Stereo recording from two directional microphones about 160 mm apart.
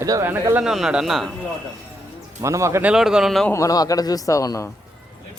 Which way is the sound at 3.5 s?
20° left (ahead or behind).